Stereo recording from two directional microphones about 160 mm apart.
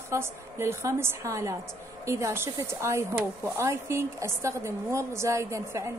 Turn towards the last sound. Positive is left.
turn(degrees=-20)  # may be behind; listen again after turning